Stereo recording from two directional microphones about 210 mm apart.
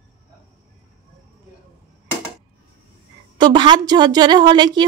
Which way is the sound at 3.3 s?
20° right (ahead or behind).